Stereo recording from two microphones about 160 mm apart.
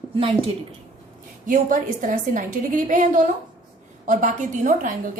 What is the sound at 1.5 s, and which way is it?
A woman's voice, 55° right (ahead or behind).